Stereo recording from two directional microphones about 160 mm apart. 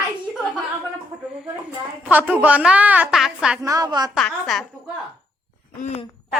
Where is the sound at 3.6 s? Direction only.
25° right (ahead or behind).